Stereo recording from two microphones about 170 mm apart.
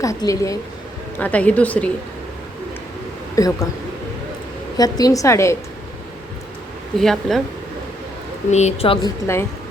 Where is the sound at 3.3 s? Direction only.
20° left (ahead or behind).